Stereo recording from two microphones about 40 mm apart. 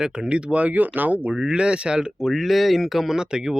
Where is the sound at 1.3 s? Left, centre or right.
Right.